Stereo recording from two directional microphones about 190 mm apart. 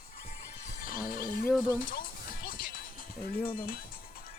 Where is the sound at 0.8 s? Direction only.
45° left (ahead or behind).